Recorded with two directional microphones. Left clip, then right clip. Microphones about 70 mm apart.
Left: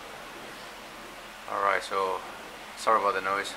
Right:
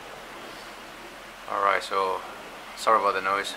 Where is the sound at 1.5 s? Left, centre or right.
Centre.